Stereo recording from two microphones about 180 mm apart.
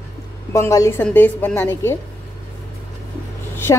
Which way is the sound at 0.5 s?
15° left (ahead or behind).